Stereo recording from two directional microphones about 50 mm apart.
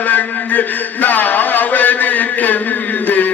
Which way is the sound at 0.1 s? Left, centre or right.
Left.